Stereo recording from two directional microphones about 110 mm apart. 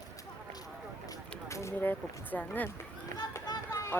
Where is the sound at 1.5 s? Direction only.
25° left (ahead or behind).